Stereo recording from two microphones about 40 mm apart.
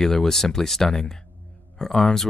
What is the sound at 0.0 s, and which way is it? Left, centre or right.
Speech, centre.